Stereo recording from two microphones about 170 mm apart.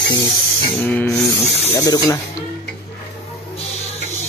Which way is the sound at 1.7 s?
20° left (ahead or behind).